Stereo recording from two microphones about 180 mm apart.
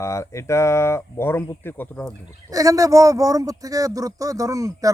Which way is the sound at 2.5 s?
20° right (ahead or behind).